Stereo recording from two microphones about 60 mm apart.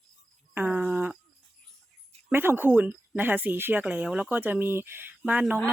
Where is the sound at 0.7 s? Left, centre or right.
Right.